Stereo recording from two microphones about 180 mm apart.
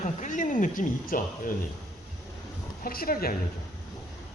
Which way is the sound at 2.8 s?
55° left (ahead or behind).